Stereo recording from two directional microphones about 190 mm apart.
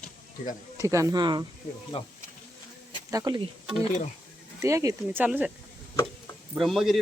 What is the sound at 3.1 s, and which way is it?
Speech, 20° right (ahead or behind).